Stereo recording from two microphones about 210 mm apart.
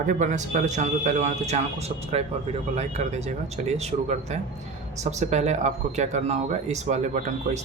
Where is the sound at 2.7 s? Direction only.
35° right (ahead or behind).